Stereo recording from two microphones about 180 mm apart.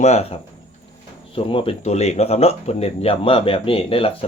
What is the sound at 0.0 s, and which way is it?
Speech, 35° left (ahead or behind).